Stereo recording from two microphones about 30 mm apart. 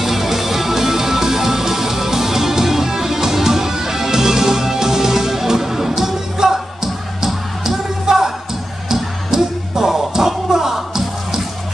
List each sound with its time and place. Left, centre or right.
0.0 s music: centre